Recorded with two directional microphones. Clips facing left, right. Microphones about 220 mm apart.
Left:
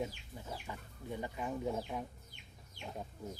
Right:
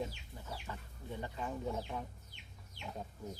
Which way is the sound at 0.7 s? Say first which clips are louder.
Left 1 dB; 15° left (ahead or behind).